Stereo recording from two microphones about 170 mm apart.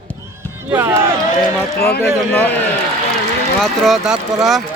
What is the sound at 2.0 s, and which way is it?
Speech, 10° left (ahead or behind).